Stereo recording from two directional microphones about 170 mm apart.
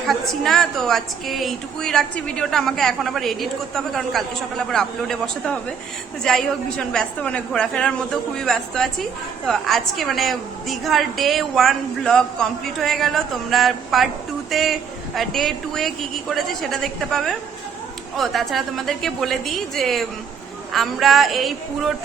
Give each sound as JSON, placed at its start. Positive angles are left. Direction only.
{"t": 0.1, "sound": "a woman's voice", "side_deg": 0}